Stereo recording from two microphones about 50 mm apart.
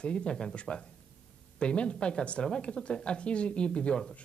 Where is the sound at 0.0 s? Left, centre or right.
Left.